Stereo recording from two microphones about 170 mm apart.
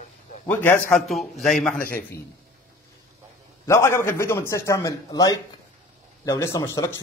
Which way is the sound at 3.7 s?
15° left (ahead or behind).